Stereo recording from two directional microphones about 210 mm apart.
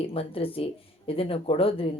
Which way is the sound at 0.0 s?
25° left (ahead or behind).